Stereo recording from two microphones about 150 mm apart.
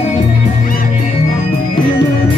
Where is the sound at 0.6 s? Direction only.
70° left (ahead or behind).